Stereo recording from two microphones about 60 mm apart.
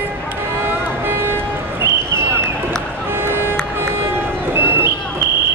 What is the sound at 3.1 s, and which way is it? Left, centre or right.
Music, right.